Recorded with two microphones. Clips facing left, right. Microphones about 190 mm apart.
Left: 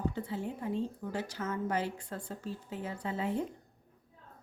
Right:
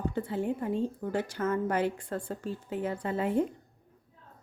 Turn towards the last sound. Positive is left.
turn(degrees=-55)  # may be behind; listen again after turning